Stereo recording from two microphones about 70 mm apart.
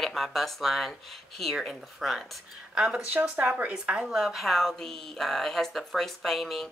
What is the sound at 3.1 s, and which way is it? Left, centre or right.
Speech, right.